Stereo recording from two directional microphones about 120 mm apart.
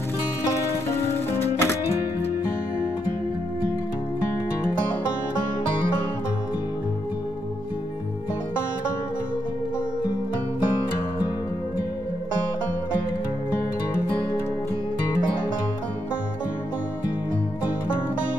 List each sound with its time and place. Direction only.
1.3 s music: 20° left (ahead or behind)